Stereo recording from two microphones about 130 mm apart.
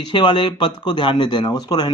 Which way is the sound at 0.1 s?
35° left (ahead or behind).